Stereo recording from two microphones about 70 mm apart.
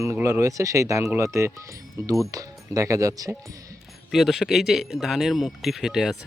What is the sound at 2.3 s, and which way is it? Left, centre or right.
Speech, right.